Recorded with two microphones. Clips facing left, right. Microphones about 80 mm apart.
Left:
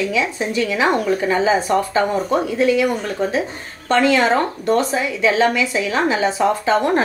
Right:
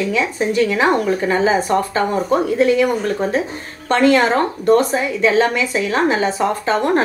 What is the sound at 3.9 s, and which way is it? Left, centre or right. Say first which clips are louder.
A woman's voice: right 1 dB; right.